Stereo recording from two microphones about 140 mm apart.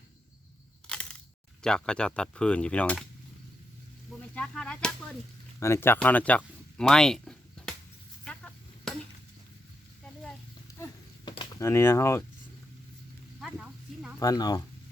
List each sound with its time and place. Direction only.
0.9 s a sound: 5° left (ahead or behind)
1.6 s speech: 5° left (ahead or behind)
4.4 s speech: 5° left (ahead or behind)
5.5 s speech: 20° left (ahead or behind); by 7.7 s 5° left (ahead or behind)
8.2 s chop: 5° left (ahead or behind)
11.3 s a sound: 35° left (ahead or behind)
11.6 s speech: 20° left (ahead or behind)
13.4 s snake: 5° right (ahead or behind)
14.2 s speech: 25° left (ahead or behind)